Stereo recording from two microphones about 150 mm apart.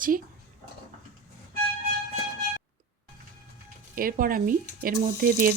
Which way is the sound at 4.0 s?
70° right (ahead or behind).